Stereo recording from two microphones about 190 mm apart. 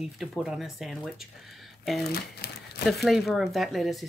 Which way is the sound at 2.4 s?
55° left (ahead or behind).